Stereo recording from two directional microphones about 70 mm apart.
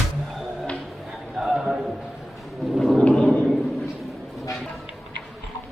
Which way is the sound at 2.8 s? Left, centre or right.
Centre.